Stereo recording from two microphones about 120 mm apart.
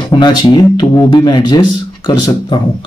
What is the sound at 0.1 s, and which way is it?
Speech, 40° left (ahead or behind).